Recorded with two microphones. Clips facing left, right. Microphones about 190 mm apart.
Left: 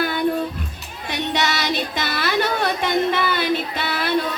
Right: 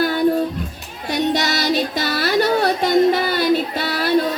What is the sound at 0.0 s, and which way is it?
Music, 40° right (ahead or behind).